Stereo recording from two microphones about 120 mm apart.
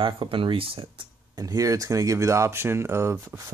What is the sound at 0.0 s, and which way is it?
Speech, 45° right (ahead or behind).